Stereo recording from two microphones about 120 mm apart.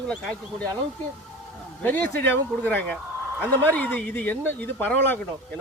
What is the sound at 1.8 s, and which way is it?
Speech, 15° left (ahead or behind).